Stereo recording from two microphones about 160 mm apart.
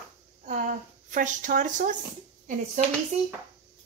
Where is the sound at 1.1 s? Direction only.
55° right (ahead or behind).